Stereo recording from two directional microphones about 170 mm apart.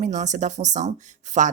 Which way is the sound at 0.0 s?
45° right (ahead or behind).